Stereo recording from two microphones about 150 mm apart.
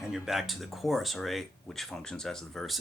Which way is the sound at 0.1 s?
Centre (ahead or behind).